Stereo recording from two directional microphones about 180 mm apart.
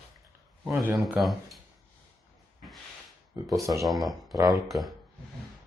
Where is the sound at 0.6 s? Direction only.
5° right (ahead or behind).